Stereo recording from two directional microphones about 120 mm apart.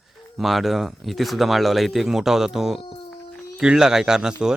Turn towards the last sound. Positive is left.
turn(degrees=-5)  # may be behind; listen again after turning